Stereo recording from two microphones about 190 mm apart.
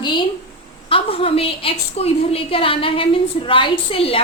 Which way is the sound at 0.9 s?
30° left (ahead or behind).